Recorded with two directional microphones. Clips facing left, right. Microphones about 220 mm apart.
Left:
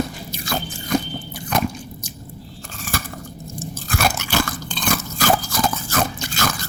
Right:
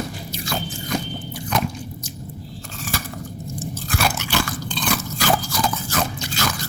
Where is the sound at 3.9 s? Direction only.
45° left (ahead or behind).